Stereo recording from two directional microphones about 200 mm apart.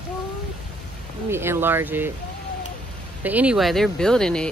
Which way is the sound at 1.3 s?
10° right (ahead or behind).